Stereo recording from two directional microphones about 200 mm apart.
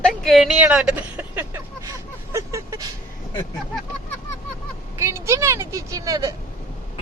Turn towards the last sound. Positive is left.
turn(degrees=-15)  # may be behind; listen again after turning